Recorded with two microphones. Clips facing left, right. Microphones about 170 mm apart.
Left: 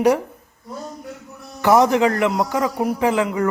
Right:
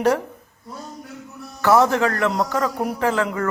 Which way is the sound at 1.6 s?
15° left (ahead or behind).